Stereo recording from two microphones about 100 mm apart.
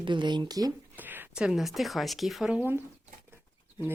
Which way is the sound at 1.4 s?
5° right (ahead or behind).